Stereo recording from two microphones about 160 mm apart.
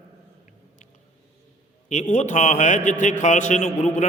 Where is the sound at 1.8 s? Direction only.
50° left (ahead or behind).